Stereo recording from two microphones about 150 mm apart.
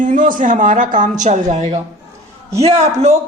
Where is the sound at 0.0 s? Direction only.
60° right (ahead or behind).